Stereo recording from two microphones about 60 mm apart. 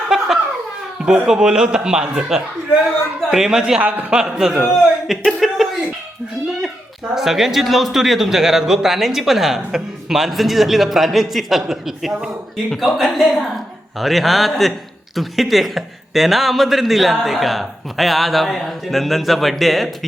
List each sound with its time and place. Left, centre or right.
0.1 s a sound: centre
1.0 s speech: centre
3.8 s a man's voice: right
4.1 s a man's voice: centre
5.2 s a sound: centre
7.1 s a man's voice: centre